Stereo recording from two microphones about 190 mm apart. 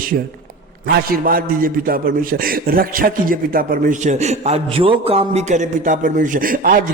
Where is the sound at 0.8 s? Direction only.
55° right (ahead or behind).